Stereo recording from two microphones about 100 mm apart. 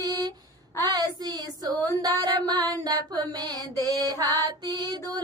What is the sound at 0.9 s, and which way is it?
Female singing, 40° right (ahead or behind).